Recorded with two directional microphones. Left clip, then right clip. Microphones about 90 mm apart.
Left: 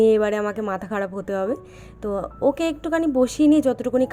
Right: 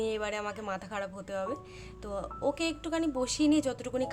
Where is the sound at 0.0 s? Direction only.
55° left (ahead or behind).